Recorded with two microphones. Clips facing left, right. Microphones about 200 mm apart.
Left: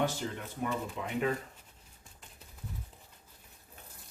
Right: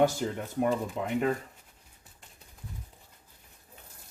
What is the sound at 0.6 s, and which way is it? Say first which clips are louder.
Speech: right 7 dB; 45° right (ahead or behind).